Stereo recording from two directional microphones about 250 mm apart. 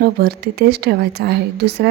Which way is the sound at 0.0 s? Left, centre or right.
Right.